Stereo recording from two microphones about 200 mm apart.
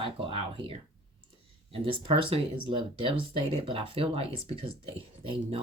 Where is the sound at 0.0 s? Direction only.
25° right (ahead or behind).